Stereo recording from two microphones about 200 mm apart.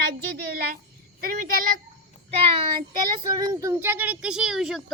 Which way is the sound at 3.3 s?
15° right (ahead or behind).